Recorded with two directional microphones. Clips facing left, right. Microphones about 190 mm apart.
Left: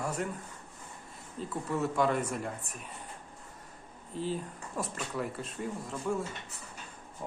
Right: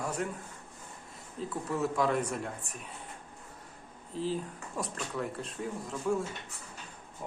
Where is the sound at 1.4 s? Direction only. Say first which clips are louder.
Even; centre (ahead or behind).